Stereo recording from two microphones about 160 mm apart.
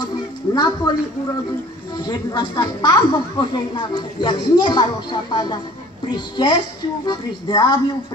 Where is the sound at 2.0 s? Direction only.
25° left (ahead or behind).